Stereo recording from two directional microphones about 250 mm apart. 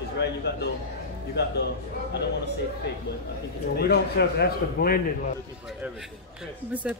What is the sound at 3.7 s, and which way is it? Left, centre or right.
A man's voice, left.